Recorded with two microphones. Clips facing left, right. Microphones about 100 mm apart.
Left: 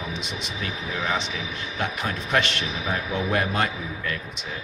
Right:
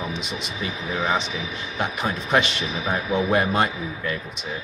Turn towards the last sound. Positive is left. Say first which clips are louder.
# right 2 dB
turn(degrees=-20)  # may be behind; listen again after turning